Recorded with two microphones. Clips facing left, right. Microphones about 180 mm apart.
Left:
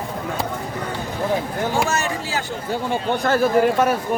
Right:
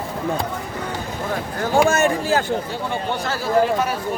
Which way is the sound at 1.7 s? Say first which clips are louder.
Right 9 dB; 55° right (ahead or behind).